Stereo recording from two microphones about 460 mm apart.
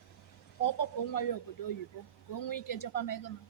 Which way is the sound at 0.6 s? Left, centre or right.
Left.